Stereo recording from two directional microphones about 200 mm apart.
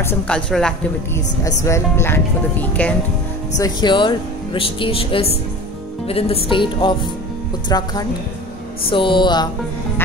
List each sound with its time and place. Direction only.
0.0 s speech: 5° left (ahead or behind)
1.6 s speech: 15° left (ahead or behind)
3.5 s speech: 20° left (ahead or behind)